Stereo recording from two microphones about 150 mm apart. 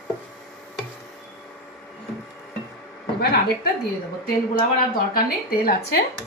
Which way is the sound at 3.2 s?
90° left.